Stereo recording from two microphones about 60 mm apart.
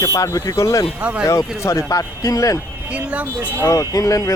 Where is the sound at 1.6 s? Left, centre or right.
Left.